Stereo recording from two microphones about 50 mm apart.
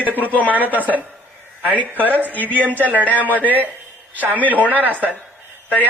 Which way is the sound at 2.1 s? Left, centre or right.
Left.